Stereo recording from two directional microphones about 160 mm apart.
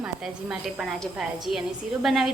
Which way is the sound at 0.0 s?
5° right (ahead or behind).